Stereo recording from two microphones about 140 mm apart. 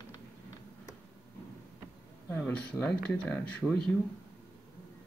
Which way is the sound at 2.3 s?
10° left (ahead or behind).